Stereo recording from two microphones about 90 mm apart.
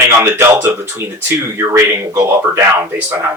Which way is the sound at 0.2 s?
30° right (ahead or behind).